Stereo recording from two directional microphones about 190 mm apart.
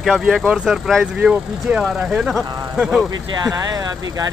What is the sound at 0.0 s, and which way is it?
Speech, centre (ahead or behind).